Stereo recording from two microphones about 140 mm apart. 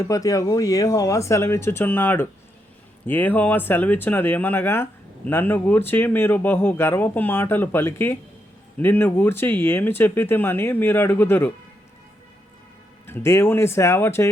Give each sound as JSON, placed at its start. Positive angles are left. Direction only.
{"t": 0.0, "sound": "speech", "side_deg": 25}
{"t": 13.1, "sound": "speech", "side_deg": 15}